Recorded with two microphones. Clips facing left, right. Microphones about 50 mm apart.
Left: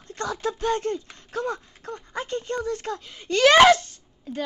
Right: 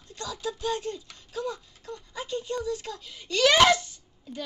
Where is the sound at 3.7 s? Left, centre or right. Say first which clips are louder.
Left 5 dB; left.